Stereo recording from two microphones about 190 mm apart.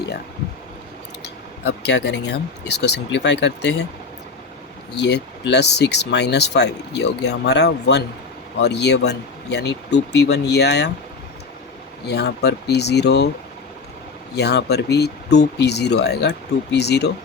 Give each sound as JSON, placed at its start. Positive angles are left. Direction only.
{"t": 1.6, "sound": "speech", "side_deg": 65}
{"t": 4.9, "sound": "speech", "side_deg": 65}
{"t": 12.0, "sound": "speech", "side_deg": 60}
{"t": 14.3, "sound": "speech", "side_deg": 60}